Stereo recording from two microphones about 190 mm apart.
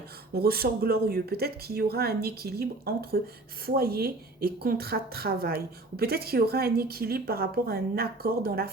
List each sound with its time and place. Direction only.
0.3 s a woman's voice: 50° right (ahead or behind)